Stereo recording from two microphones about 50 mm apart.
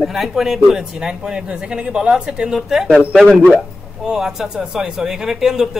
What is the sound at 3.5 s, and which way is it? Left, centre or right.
Speech, centre.